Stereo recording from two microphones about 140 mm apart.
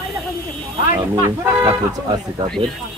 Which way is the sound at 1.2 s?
15° right (ahead or behind).